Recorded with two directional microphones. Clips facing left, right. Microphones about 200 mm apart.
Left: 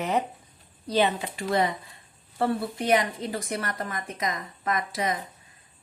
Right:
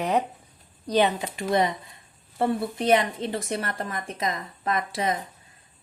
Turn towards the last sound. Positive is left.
turn(degrees=-30)  # may be behind; listen again after turning